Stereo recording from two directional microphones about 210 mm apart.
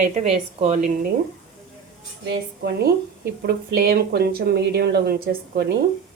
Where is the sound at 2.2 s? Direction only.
55° right (ahead or behind).